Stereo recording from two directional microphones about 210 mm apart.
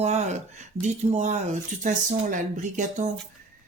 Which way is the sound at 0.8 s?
35° right (ahead or behind).